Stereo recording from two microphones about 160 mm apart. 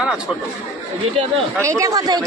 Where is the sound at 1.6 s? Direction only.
20° right (ahead or behind).